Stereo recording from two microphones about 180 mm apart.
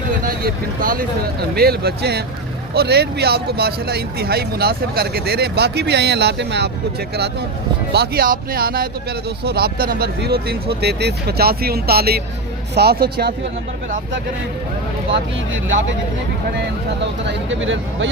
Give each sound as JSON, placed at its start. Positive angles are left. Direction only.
{"t": 0.3, "sound": "speech", "side_deg": -50}
{"t": 7.9, "sound": "speech", "side_deg": -60}
{"t": 17.2, "sound": "speech", "side_deg": -90}